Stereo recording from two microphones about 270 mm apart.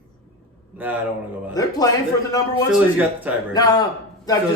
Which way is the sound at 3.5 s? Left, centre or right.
Centre.